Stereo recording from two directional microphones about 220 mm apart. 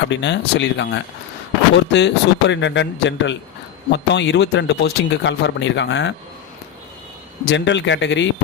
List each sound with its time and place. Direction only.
0.1 s speech: 55° left (ahead or behind)
7.4 s speech: 55° left (ahead or behind)